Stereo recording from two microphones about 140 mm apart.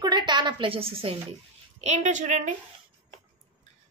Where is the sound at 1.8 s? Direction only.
55° right (ahead or behind).